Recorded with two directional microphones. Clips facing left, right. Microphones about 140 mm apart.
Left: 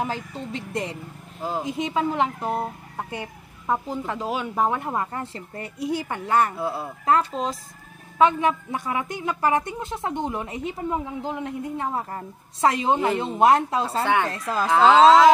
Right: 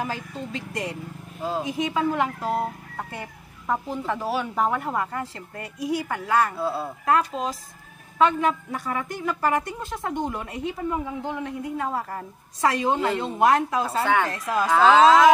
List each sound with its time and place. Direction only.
0.0 s speech: 25° left (ahead or behind)
8.2 s speech: 15° left (ahead or behind)